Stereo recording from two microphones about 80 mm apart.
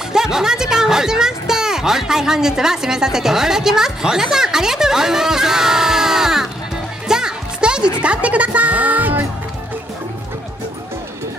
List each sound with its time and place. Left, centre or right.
0.1 s speech: centre
7.1 s music: centre
8.0 s speech: centre